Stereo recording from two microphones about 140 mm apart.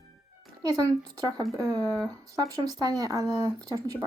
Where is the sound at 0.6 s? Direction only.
25° right (ahead or behind).